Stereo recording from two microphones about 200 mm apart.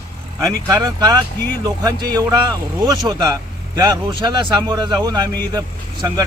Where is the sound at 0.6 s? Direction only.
15° right (ahead or behind).